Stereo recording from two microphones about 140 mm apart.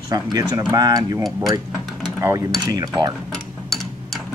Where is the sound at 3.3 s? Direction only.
5° left (ahead or behind).